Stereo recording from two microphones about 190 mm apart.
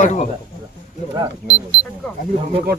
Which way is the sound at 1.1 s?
20° right (ahead or behind).